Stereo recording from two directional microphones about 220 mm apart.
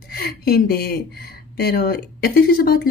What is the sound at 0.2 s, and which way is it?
Speech, 45° left (ahead or behind).